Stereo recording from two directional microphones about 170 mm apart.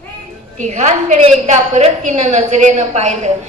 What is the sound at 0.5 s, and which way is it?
A woman's voice, 45° right (ahead or behind).